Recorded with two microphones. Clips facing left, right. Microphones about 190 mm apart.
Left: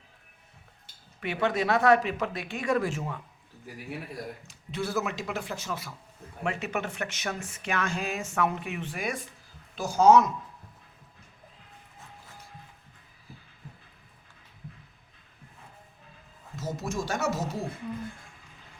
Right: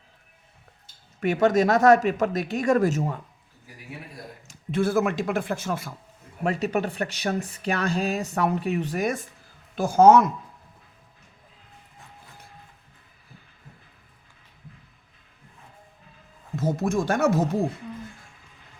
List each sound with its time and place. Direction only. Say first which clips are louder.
1.2 s speech: right 8 dB; 45° right (ahead or behind)
4.4 s speech: right 11 dB; 50° right (ahead or behind)
6.4 s speech: right 6 dB; 40° right (ahead or behind); by 10.2 s 55° right (ahead or behind)
16.6 s speech: right 8 dB; 55° right (ahead or behind)